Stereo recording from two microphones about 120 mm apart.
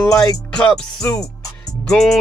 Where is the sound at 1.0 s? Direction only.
25° left (ahead or behind).